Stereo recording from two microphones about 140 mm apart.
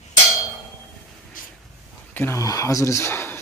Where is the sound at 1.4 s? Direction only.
85° left.